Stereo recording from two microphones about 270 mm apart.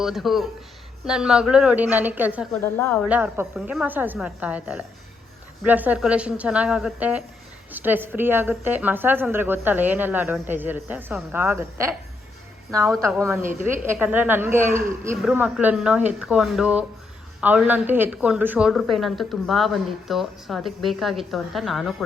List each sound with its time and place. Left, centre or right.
0.0 s a woman's voice: centre
13.0 s a woman's voice: centre
13.4 s a woman's voice: right
13.8 s a woman's voice: centre